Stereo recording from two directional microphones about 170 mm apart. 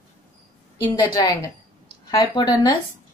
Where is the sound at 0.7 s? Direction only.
20° left (ahead or behind).